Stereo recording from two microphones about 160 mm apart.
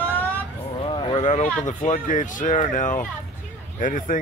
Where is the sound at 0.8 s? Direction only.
30° left (ahead or behind).